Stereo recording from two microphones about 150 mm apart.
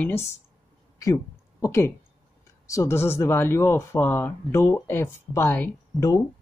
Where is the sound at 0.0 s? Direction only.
15° left (ahead or behind).